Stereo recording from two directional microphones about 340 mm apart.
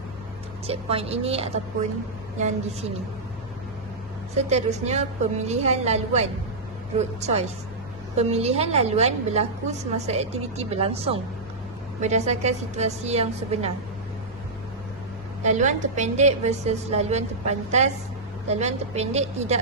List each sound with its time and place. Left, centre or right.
0.7 s a woman's voice: centre
4.4 s a woman's voice: centre
15.4 s a woman's voice: right